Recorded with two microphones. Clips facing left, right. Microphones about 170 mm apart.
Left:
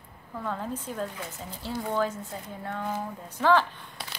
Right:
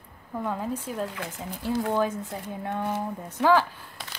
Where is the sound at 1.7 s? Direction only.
80° right.